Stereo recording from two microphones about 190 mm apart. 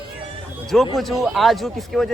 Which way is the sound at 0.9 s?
Centre (ahead or behind).